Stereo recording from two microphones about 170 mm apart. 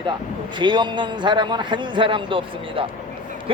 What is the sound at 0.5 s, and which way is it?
A man's voice, 25° right (ahead or behind).